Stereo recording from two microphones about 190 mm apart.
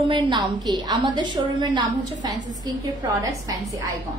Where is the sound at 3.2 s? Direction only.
20° right (ahead or behind).